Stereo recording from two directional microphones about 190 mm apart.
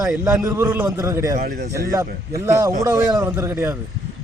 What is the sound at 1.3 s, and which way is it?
Speech, 45° right (ahead or behind).